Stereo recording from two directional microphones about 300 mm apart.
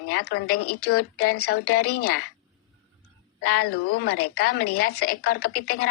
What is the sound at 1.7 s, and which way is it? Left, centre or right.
Speech, left.